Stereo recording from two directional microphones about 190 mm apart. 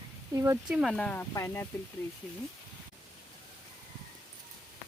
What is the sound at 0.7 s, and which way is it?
Speech, centre (ahead or behind).